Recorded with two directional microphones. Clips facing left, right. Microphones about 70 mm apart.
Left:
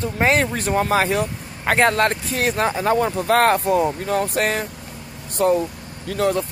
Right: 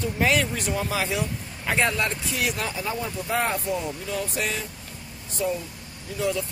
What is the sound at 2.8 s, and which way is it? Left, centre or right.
Speech, left.